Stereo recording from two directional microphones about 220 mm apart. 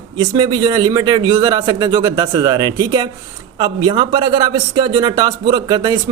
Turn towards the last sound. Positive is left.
turn(degrees=-20)  # may be behind; listen again after turning